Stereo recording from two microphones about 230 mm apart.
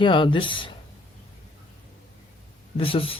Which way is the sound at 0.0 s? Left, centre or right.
Left.